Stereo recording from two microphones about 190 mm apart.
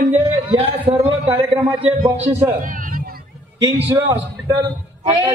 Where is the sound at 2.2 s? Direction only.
10° right (ahead or behind).